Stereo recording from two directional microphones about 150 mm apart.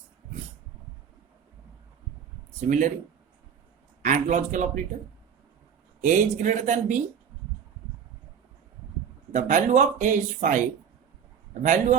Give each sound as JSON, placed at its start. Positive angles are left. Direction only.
{"t": 2.6, "sound": "speech", "side_deg": -55}
{"t": 4.0, "sound": "a man's voice", "side_deg": -55}
{"t": 6.0, "sound": "speech", "side_deg": -55}
{"t": 9.3, "sound": "speech", "side_deg": -55}
{"t": 11.6, "sound": "speech", "side_deg": -55}